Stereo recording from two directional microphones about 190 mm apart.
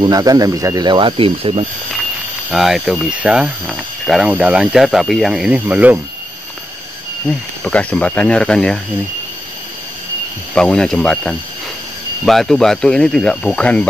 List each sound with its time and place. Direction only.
0.0 s speech: 20° right (ahead or behind)
2.5 s speech: centre (ahead or behind)
7.6 s speech: 5° left (ahead or behind)
10.5 s speech: 5° left (ahead or behind)